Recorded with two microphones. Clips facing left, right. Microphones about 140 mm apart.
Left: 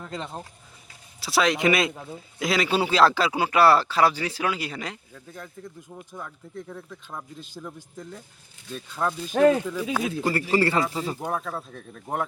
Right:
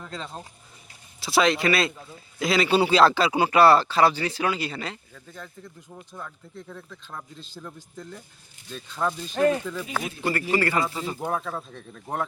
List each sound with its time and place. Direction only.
0.1 s speech: 15° left (ahead or behind)
1.2 s speech: 5° left (ahead or behind)
1.5 s speech: 20° left (ahead or behind)
10.2 s a man's voice: 35° left (ahead or behind)
10.9 s speech: 10° left (ahead or behind)